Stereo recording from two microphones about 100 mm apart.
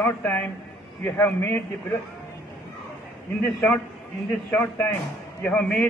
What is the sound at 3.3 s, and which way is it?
Speech, 10° left (ahead or behind).